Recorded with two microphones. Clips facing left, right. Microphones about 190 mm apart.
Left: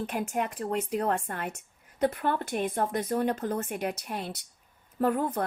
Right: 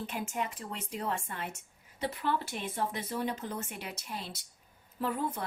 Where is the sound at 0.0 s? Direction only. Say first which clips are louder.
Left 5 dB; 55° left (ahead or behind).